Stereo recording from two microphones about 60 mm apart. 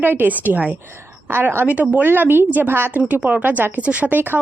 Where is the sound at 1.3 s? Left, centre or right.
Right.